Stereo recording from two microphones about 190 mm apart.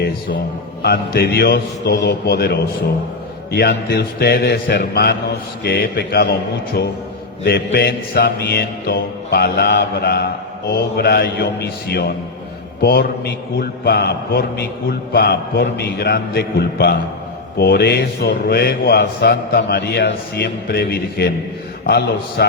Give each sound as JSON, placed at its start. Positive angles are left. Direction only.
{"t": 0.8, "sound": "a man's voice", "side_deg": 55}
{"t": 7.4, "sound": "a man's voice", "side_deg": 55}